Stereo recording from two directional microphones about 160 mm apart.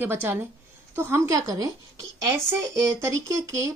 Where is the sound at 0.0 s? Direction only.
15° right (ahead or behind).